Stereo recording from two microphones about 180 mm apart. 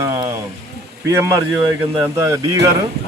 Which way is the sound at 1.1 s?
15° right (ahead or behind).